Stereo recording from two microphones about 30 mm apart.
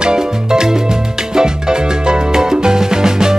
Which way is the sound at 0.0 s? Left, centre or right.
Right.